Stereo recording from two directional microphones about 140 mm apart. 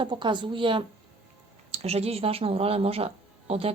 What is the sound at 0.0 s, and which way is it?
A woman's voice, 35° right (ahead or behind).